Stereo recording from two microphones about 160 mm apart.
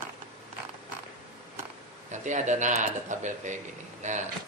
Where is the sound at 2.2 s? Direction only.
50° right (ahead or behind).